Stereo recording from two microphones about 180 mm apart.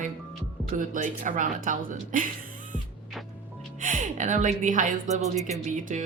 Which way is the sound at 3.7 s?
45° right (ahead or behind).